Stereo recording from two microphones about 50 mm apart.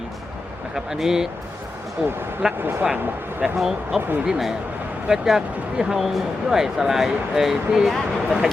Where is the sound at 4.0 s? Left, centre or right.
Right.